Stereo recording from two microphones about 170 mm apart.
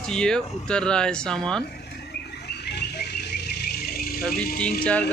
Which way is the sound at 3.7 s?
65° left (ahead or behind).